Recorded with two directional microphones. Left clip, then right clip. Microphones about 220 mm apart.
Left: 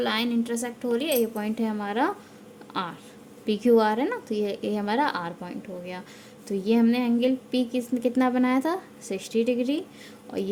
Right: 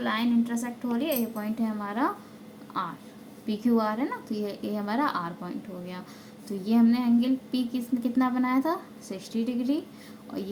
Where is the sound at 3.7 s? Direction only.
45° left (ahead or behind).